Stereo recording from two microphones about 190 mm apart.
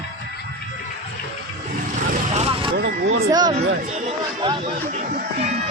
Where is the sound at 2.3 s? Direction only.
30° right (ahead or behind).